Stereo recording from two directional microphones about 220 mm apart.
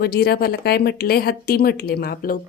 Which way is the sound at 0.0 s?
45° left (ahead or behind).